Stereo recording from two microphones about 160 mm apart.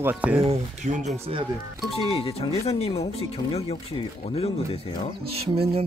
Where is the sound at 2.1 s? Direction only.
40° left (ahead or behind).